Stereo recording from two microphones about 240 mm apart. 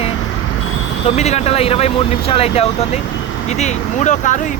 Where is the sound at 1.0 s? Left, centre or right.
Left.